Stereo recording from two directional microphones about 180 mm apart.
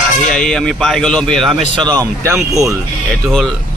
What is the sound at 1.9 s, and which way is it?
Speech, 20° right (ahead or behind).